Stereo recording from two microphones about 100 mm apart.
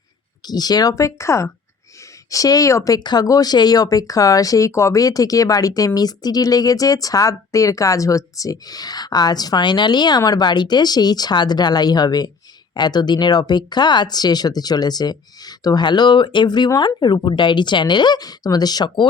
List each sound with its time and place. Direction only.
0.4 s speech: 40° left (ahead or behind)